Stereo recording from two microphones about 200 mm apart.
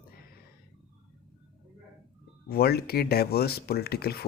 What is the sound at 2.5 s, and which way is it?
Speech, 50° left (ahead or behind).